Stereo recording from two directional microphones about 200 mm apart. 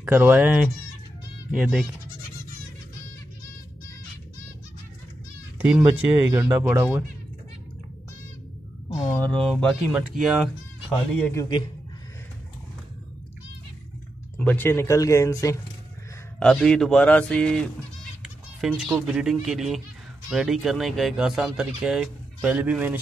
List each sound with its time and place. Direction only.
0.0 s speech: 10° right (ahead or behind)
5.6 s speech: 5° right (ahead or behind)
6.0 s speech: 20° right (ahead or behind)
8.9 s speech: 10° left (ahead or behind)
14.3 s speech: 10° left (ahead or behind)
16.3 s speech: 5° left (ahead or behind)